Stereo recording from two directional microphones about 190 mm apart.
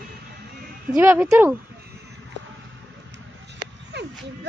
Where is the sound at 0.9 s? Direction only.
10° right (ahead or behind).